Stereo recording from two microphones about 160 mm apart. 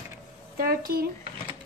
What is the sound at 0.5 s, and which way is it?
Speech, 70° right (ahead or behind).